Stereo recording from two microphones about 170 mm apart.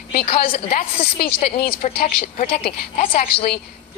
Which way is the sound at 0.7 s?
60° left (ahead or behind).